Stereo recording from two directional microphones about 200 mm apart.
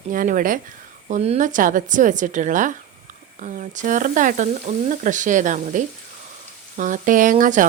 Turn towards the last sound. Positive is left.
turn(degrees=-40)  # may be behind; listen again after turning